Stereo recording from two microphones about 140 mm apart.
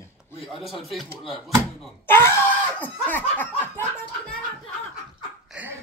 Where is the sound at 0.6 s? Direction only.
Centre (ahead or behind).